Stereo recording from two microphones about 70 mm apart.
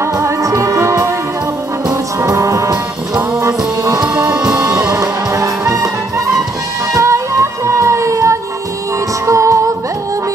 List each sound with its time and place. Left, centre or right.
0.0 s music: right
2.2 s music: right